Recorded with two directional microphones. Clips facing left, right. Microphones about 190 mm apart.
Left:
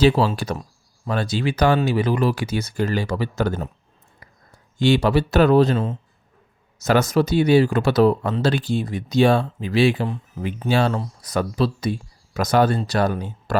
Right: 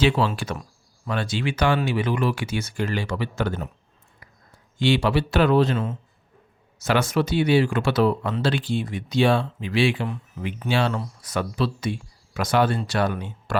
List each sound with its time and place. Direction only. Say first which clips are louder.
0.0 s speech: left 4 dB; 35° left (ahead or behind)
4.2 s a sound: left 2 dB; 40° left (ahead or behind)
4.8 s speech: left 3 dB; 45° left (ahead or behind)